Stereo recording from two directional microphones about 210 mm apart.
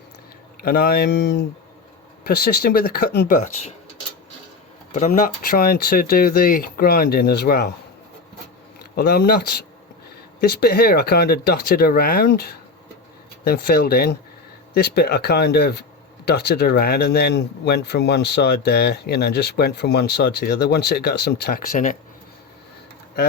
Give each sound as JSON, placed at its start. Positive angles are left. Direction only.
{"t": 0.6, "sound": "speech", "side_deg": 45}
{"t": 4.9, "sound": "speech", "side_deg": 35}
{"t": 9.0, "sound": "speech", "side_deg": 45}